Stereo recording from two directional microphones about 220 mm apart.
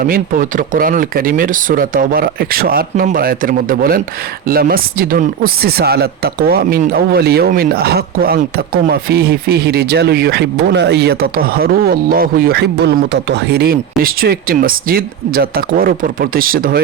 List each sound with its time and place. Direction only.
0.0 s speech: 40° right (ahead or behind)